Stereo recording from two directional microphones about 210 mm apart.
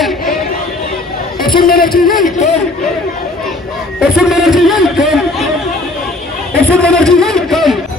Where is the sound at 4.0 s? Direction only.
Centre (ahead or behind).